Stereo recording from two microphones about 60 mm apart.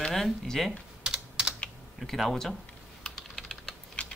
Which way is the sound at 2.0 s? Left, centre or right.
Centre.